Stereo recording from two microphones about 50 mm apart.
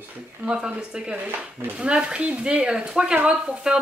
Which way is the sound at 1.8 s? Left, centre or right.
Centre.